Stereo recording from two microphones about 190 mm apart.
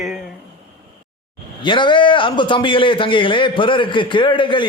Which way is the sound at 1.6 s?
25° left (ahead or behind).